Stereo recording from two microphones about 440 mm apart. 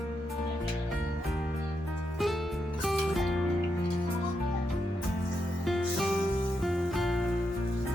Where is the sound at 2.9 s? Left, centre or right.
Centre.